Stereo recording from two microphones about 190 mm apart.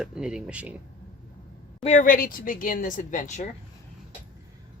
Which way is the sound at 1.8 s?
40° left (ahead or behind).